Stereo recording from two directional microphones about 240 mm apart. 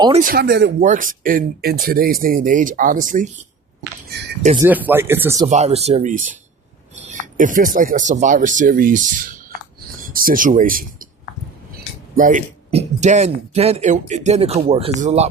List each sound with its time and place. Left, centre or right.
0.0 s speech: right
0.9 s speech: right
4.5 s speech: centre
5.5 s a man's voice: right
12.1 s a man's voice: right